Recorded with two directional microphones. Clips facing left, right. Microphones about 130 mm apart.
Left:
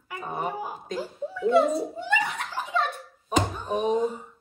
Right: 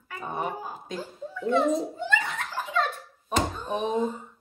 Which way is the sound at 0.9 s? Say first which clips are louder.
Left 6 dB; 5° left (ahead or behind).